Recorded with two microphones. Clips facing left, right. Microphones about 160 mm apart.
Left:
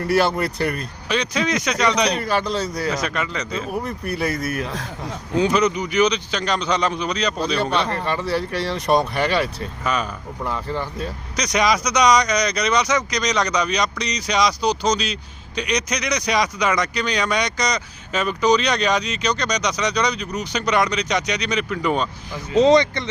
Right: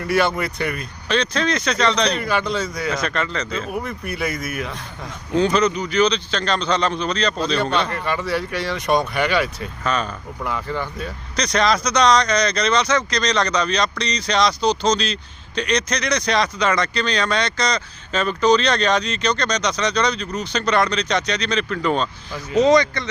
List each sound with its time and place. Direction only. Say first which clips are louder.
0.1 s speech: even; 35° left (ahead or behind)
1.0 s speech: right 2 dB; 10° left (ahead or behind)
2.1 s speech: even; 35° left (ahead or behind)
2.9 s speech: right 1 dB; 10° left (ahead or behind)
3.8 s speech: left 2 dB; 35° left (ahead or behind)
5.3 s speech: right 1 dB; 10° left (ahead or behind)
7.9 s speech: left 1 dB; 30° left (ahead or behind)
9.8 s speech: right 1 dB; 10° left (ahead or behind)
10.4 s speech: even; 30° left (ahead or behind)
11.3 s speech: right 1 dB; 10° left (ahead or behind)
22.5 s speech: left 1 dB; 25° left (ahead or behind)